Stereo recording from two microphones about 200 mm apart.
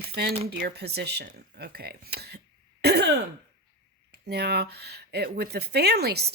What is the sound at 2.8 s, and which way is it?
Throat clearing, 55° right (ahead or behind).